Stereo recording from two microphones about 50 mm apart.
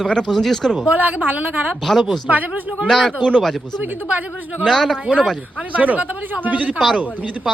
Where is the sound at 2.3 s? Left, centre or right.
Right.